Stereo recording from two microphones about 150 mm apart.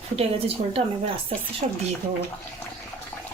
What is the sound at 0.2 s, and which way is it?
Speech, 40° right (ahead or behind).